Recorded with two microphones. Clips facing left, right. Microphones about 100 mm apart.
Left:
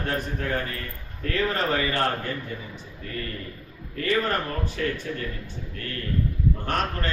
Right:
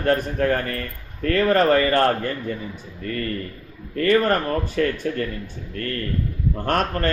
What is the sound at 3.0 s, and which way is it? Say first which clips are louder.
A man's voice: right 7 dB; 50° right (ahead or behind).